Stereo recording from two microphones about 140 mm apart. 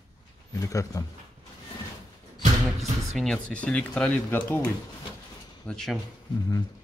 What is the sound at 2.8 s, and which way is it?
Speech, 5° left (ahead or behind).